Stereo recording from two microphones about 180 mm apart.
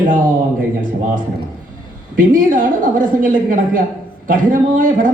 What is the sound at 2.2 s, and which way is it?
A woman's voice, 50° right (ahead or behind).